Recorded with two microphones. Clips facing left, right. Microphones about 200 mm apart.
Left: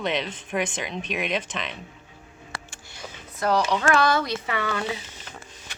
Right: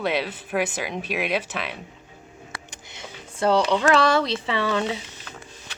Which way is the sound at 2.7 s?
20° right (ahead or behind).